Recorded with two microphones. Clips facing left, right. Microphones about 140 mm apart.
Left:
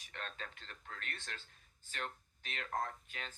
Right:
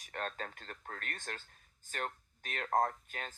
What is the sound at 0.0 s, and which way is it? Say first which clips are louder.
Speech: right 7 dB; 45° right (ahead or behind).